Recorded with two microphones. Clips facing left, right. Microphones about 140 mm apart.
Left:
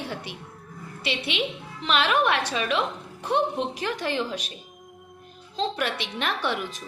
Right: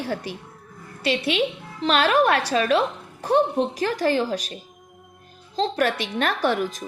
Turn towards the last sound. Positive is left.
turn(degrees=-40)  # may be behind; listen again after turning